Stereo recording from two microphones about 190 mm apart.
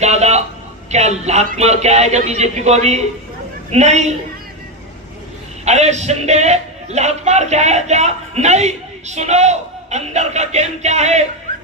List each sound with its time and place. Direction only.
0.0 s a sound: 35° right (ahead or behind)
0.9 s a man's voice: 35° right (ahead or behind)
5.6 s a man's voice: 35° right (ahead or behind)